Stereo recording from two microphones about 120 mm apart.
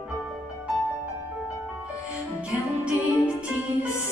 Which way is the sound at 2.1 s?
10° right (ahead or behind).